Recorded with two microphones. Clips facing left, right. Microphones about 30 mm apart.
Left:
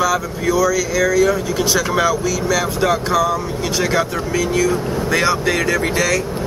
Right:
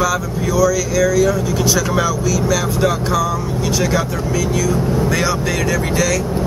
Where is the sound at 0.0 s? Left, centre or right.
Centre.